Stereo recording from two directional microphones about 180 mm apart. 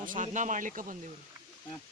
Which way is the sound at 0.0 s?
45° right (ahead or behind).